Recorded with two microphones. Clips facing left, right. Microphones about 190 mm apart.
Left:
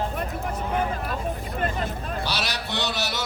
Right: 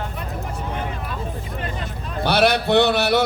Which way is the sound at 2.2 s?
55° right (ahead or behind).